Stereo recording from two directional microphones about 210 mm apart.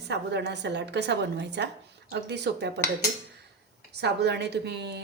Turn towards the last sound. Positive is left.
turn(degrees=-55)  # may be behind; listen again after turning